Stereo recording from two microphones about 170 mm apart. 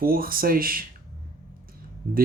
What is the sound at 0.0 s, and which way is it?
Speech, 60° right (ahead or behind).